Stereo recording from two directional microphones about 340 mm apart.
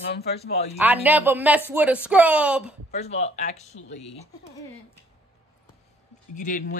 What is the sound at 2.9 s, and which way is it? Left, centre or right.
Speech, centre.